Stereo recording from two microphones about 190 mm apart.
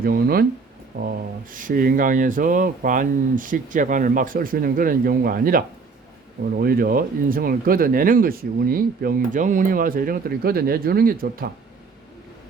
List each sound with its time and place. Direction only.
0.0 s speech: 50° right (ahead or behind)